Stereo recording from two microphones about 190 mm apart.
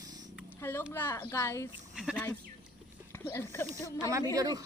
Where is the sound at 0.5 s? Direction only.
10° left (ahead or behind).